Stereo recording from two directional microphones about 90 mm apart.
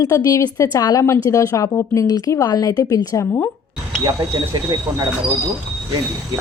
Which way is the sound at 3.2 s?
25° left (ahead or behind).